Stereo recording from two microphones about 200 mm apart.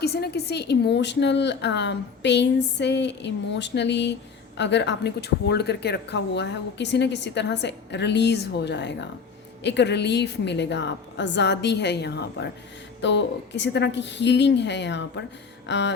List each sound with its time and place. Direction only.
0.0 s speech: 55° left (ahead or behind)